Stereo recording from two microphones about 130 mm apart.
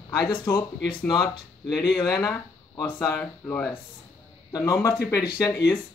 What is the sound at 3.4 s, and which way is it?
Speech, 15° left (ahead or behind).